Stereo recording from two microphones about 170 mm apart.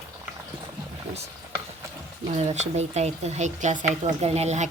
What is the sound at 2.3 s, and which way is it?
Speech, 40° right (ahead or behind).